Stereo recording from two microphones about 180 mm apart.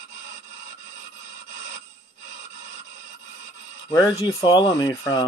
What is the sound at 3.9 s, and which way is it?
Speech, 20° left (ahead or behind).